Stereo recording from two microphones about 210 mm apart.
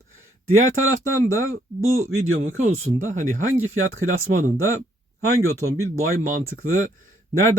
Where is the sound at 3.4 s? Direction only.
75° right (ahead or behind).